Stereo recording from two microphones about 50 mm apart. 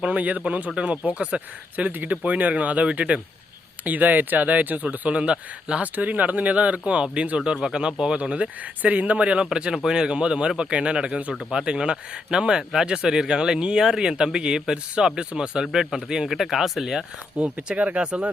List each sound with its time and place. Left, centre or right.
0.0 s speech: right
1.9 s speech: right
5.8 s speech: right; by 17.1 s centre
17.3 s speech: right